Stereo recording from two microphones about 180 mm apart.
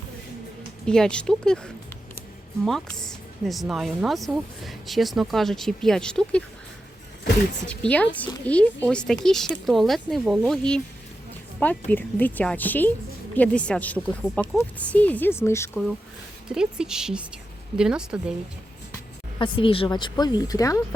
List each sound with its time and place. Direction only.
0.9 s speech: 5° left (ahead or behind)
7.7 s speech: 5° left (ahead or behind)
11.9 s speech: 10° left (ahead or behind)
16.5 s speech: 5° right (ahead or behind)
19.4 s speech: 30° left (ahead or behind)